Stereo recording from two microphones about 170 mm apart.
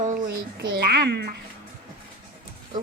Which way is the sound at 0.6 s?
70° right (ahead or behind).